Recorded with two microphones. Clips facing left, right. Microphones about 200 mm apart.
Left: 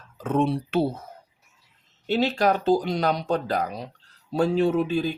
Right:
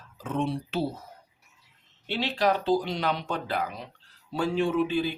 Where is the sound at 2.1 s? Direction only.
45° left (ahead or behind).